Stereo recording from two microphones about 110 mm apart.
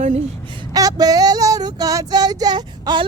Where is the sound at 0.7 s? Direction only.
35° right (ahead or behind).